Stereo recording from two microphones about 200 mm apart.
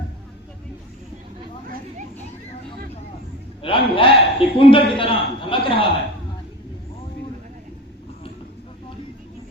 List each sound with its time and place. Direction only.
3.6 s a man's voice: 25° left (ahead or behind)